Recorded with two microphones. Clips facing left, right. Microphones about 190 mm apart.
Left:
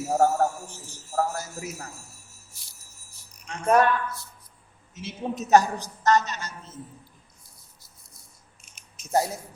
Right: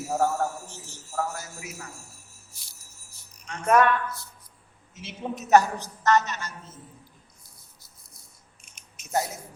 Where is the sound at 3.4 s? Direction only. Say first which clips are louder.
Even; 35° left (ahead or behind).